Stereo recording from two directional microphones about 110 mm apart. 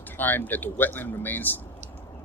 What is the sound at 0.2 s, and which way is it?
Speech, 15° left (ahead or behind).